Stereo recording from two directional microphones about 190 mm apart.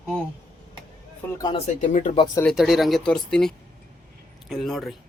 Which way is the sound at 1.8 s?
40° left (ahead or behind).